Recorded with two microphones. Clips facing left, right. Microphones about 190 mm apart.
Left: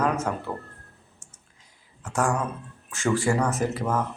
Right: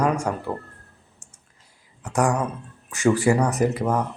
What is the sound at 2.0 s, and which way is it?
Speech, 15° right (ahead or behind).